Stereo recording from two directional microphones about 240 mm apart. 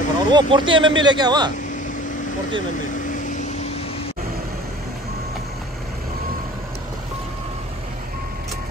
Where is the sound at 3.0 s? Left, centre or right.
Left.